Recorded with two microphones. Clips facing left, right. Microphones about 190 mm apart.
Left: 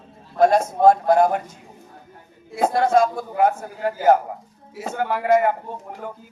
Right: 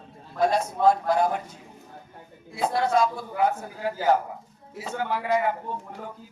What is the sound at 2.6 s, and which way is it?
A man's voice, 50° left (ahead or behind).